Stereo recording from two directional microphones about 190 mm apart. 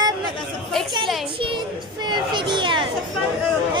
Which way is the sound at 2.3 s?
25° right (ahead or behind).